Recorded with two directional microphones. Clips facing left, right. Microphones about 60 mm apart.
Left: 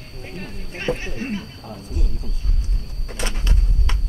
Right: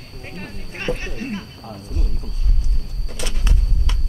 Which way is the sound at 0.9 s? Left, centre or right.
Left.